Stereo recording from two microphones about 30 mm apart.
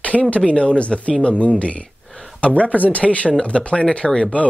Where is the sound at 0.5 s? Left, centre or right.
Left.